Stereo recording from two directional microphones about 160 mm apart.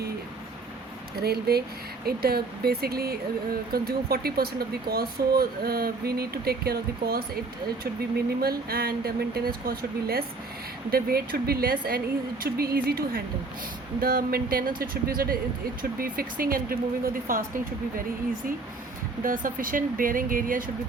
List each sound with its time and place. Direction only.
1.1 s speech: 75° right (ahead or behind)
8.4 s speech: 70° right (ahead or behind)
19.2 s speech: 60° right (ahead or behind)